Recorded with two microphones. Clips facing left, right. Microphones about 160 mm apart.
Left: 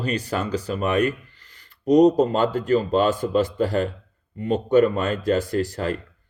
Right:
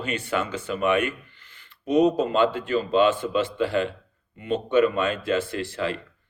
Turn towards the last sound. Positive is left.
turn(degrees=40)  # may be behind; listen again after turning